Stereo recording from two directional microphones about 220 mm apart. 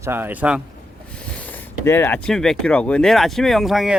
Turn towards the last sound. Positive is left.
turn(degrees=0)  # may be behind; listen again after turning